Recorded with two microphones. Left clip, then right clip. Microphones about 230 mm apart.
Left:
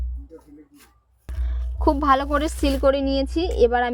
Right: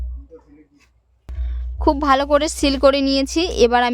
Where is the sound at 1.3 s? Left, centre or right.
Centre.